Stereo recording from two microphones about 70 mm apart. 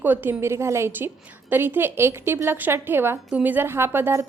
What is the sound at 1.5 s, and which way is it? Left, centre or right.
A woman's voice, right.